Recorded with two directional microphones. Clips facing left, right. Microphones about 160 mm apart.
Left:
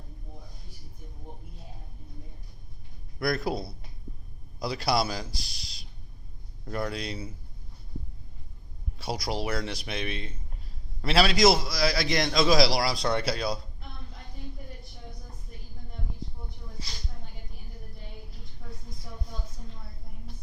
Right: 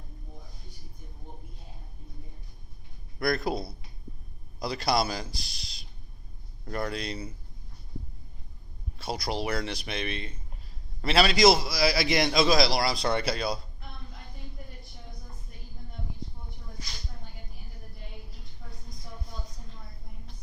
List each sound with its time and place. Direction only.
3.2 s a man's voice: 5° left (ahead or behind)
9.2 s a man's voice: 5° left (ahead or behind)
16.8 s a sound: 30° left (ahead or behind)